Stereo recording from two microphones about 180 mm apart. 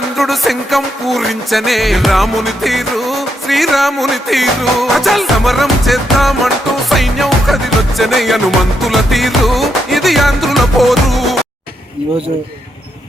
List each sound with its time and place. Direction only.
0.2 s music: centre (ahead or behind)